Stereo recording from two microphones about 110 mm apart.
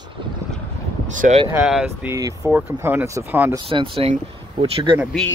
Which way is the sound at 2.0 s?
30° right (ahead or behind).